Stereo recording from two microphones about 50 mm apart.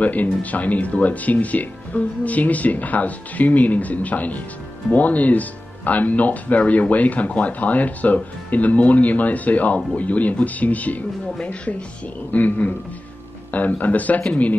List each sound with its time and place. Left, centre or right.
0.0 s speech: left